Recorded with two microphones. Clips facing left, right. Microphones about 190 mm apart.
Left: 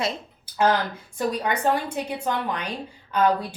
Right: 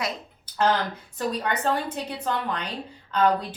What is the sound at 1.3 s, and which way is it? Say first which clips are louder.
A woman's voice: left 2 dB; 10° left (ahead or behind).